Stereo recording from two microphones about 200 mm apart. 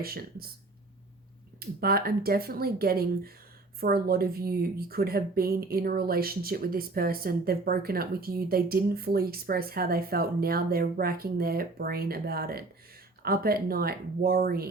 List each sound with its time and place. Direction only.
0.0 s a woman's voice: 50° right (ahead or behind)
1.5 s a woman's voice: 50° right (ahead or behind)